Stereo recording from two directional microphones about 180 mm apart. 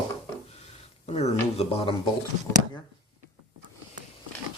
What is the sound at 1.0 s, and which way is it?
Speech, 35° left (ahead or behind).